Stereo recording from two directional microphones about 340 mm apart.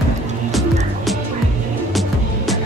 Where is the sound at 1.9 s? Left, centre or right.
Centre.